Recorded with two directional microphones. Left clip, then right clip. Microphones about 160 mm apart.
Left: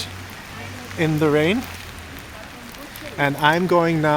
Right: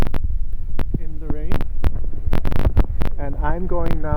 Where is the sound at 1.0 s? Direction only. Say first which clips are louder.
Left 17 dB; 10° left (ahead or behind).